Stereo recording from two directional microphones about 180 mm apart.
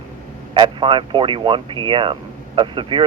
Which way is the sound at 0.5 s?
25° right (ahead or behind).